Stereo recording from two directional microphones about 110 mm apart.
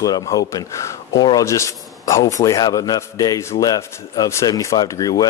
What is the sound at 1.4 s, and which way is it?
A man's voice, 30° left (ahead or behind).